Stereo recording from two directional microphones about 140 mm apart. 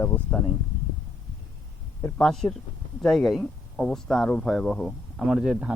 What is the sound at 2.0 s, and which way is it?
Speech, 5° left (ahead or behind).